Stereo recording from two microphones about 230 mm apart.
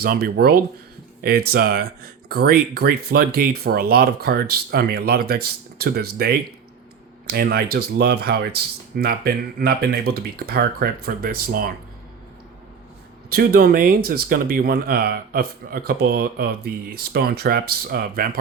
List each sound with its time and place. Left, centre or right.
0.0 s speech: right
13.3 s speech: right